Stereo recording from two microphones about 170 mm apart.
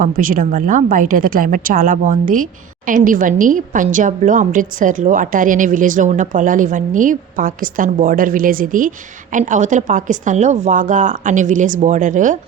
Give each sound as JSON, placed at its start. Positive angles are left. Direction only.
{"t": 0.0, "sound": "a woman's voice", "side_deg": -55}